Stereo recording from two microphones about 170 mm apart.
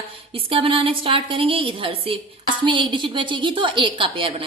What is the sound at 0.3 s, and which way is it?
A woman's voice, 30° right (ahead or behind).